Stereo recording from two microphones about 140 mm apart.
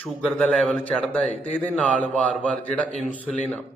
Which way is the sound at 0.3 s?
10° left (ahead or behind).